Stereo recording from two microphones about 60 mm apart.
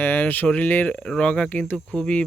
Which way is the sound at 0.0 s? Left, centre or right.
Left.